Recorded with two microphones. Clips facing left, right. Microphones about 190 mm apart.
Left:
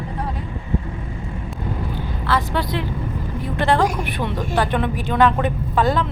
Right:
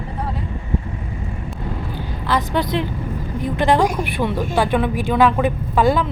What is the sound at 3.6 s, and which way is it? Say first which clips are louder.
A woman's voice: right 2 dB; 15° right (ahead or behind).